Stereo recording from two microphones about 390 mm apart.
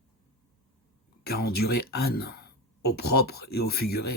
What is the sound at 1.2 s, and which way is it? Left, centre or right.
Speech, left.